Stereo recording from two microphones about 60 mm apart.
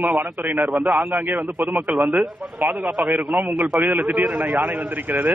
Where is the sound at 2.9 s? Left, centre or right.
Right.